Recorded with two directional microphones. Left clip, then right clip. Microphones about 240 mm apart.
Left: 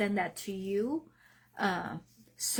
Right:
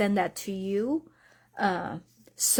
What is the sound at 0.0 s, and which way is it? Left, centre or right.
Speech, right.